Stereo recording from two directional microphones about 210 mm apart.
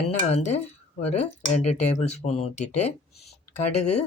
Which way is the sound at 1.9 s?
30° left (ahead or behind).